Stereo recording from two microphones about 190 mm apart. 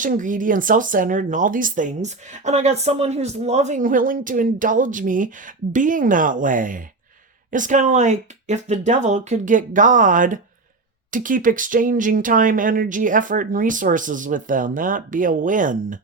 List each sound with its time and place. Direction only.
0.0 s speech: 45° right (ahead or behind)